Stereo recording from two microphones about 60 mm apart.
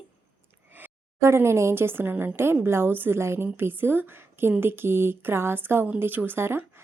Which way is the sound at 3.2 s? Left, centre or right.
Right.